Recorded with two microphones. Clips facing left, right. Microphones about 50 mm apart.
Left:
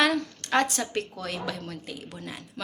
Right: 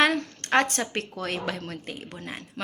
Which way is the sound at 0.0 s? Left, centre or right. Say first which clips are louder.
Right 1 dB; right.